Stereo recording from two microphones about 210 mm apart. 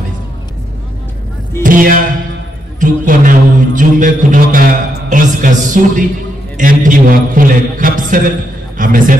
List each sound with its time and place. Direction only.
1.6 s speech: 40° right (ahead or behind)
2.8 s music: 40° right (ahead or behind)
8.7 s a man's voice: 40° right (ahead or behind)